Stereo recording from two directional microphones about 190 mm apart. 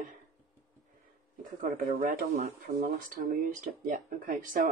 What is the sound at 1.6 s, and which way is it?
Speech, 45° right (ahead or behind).